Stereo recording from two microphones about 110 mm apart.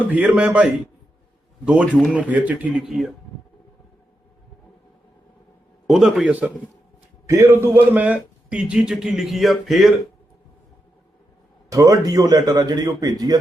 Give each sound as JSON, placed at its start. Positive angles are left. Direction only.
{"t": 0.0, "sound": "a man's voice", "side_deg": -15}
{"t": 5.9, "sound": "a man's voice", "side_deg": -5}
{"t": 7.3, "sound": "a man's voice", "side_deg": -25}
{"t": 11.7, "sound": "a man's voice", "side_deg": -30}